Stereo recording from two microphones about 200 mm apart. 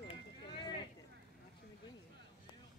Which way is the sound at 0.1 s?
25° left (ahead or behind).